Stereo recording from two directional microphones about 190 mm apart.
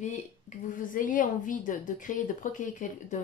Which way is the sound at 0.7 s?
45° left (ahead or behind).